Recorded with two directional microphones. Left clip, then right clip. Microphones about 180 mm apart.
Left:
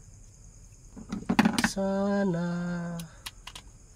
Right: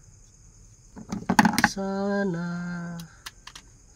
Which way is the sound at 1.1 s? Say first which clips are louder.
Right 5 dB; 40° right (ahead or behind).